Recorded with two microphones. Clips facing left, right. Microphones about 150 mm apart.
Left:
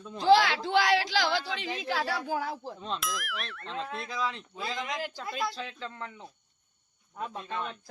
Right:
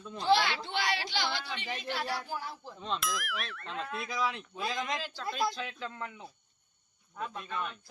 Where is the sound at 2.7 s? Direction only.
Centre (ahead or behind).